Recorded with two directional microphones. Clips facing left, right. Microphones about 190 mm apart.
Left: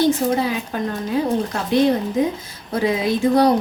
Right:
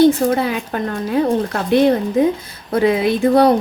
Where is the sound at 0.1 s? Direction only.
60° right (ahead or behind).